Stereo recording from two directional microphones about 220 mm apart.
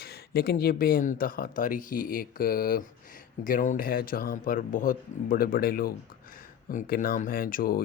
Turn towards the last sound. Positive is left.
turn(degrees=40)  # may be behind; listen again after turning